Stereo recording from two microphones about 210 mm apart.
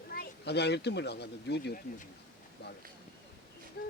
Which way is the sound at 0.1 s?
50° left (ahead or behind).